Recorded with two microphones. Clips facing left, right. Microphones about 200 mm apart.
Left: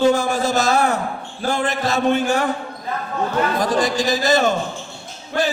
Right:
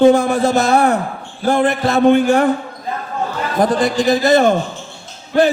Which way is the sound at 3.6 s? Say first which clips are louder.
Right 4 dB; 60° right (ahead or behind).